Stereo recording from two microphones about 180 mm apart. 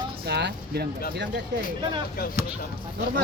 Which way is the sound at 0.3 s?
70° right (ahead or behind).